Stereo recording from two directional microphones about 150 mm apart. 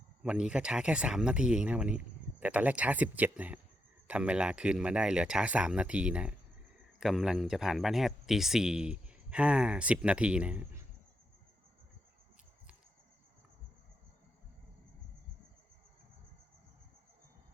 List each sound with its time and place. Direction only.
0.2 s speech: 5° right (ahead or behind)